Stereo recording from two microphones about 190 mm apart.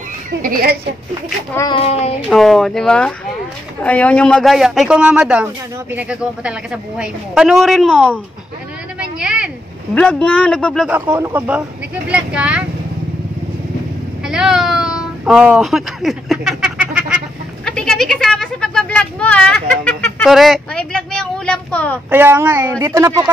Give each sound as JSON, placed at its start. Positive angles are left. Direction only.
{"t": 0.4, "sound": "a woman's voice", "side_deg": -50}
{"t": 1.7, "sound": "child singing", "side_deg": 30}
{"t": 2.2, "sound": "a man's voice", "side_deg": 0}
{"t": 9.2, "sound": "vehicle", "side_deg": -5}
{"t": 9.9, "sound": "a man's voice", "side_deg": 5}
{"t": 10.9, "sound": "a man's voice", "side_deg": -10}
{"t": 14.2, "sound": "a sound", "side_deg": -5}
{"t": 17.6, "sound": "a man's voice", "side_deg": 0}
{"t": 22.1, "sound": "speech", "side_deg": -10}